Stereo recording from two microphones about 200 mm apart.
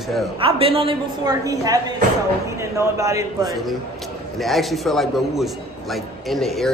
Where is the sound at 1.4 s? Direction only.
15° right (ahead or behind).